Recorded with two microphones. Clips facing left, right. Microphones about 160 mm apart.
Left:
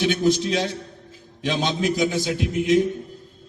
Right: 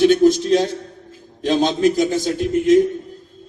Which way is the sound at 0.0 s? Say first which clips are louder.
Right 7 dB; 45° right (ahead or behind).